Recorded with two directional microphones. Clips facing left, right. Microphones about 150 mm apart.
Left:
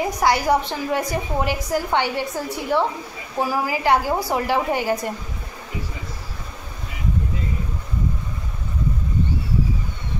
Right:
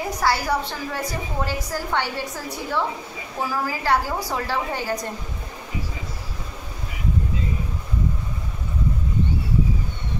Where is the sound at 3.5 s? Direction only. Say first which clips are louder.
Left 3 dB; 15° left (ahead or behind).